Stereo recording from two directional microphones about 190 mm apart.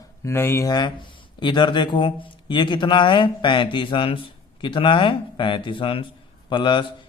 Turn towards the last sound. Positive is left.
turn(degrees=25)  # may be behind; listen again after turning